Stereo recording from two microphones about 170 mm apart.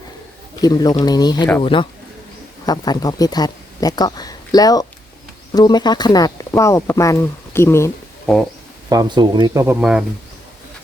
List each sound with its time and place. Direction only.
0.6 s speech: 25° left (ahead or behind)
8.9 s speech: 25° right (ahead or behind)
9.6 s speech: 5° right (ahead or behind)